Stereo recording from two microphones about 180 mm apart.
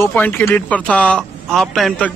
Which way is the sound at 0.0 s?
10° left (ahead or behind).